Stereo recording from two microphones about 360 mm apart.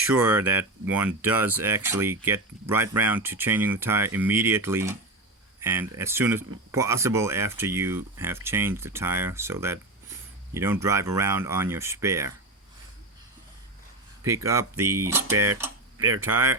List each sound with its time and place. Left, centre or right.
0.0 s speech: centre
14.3 s speech: centre